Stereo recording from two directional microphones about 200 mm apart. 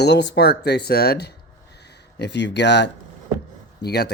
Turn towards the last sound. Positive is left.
turn(degrees=55)  # may be behind; listen again after turning